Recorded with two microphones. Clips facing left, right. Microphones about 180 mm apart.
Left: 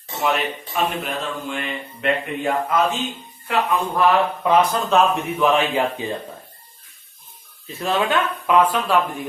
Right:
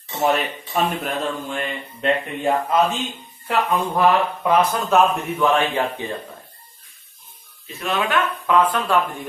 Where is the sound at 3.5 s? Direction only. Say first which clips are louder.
Even; 25° right (ahead or behind).